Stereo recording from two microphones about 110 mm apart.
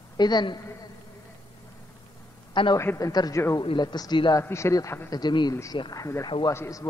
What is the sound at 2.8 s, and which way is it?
Speech, 25° left (ahead or behind).